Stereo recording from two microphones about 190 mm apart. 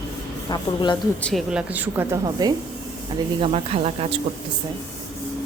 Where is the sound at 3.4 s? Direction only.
30° right (ahead or behind).